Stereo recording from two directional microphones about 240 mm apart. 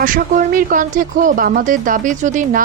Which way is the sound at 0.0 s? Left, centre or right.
Right.